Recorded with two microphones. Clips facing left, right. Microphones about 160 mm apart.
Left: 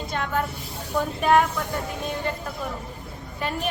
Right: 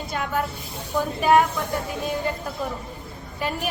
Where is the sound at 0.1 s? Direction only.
5° right (ahead or behind).